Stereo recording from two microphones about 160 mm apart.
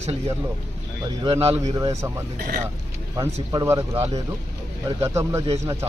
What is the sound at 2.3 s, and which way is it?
Speech, 65° right (ahead or behind).